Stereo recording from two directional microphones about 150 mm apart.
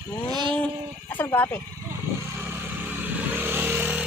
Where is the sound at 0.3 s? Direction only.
30° right (ahead or behind).